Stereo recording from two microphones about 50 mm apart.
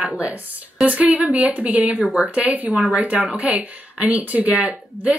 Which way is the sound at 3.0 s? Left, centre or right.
Right.